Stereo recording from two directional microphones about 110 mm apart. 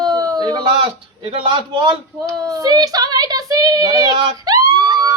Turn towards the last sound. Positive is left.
turn(degrees=-35)  # may be behind; listen again after turning